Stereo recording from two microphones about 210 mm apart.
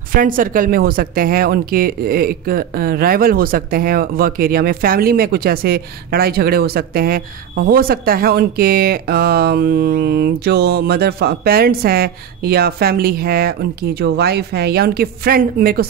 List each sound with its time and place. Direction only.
0.1 s speech: 40° right (ahead or behind)